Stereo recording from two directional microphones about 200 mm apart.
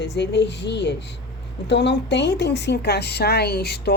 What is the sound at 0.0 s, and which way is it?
Speech, 60° left (ahead or behind).